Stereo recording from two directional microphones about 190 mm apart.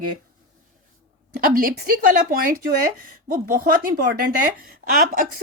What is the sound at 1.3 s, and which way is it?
Speech, 50° right (ahead or behind).